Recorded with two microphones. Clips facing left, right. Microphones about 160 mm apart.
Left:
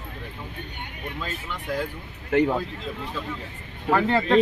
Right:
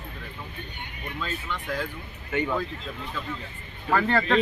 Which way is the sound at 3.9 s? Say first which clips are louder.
Left 2 dB; 15° left (ahead or behind).